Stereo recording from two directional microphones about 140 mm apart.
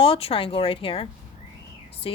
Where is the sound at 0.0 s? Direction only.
40° left (ahead or behind).